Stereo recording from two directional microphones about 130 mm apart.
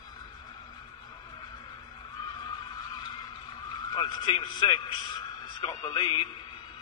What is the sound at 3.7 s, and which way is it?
A man's voice, 30° left (ahead or behind).